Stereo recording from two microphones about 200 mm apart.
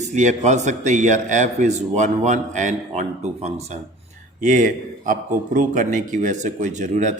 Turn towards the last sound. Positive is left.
turn(degrees=-35)  # may be behind; listen again after turning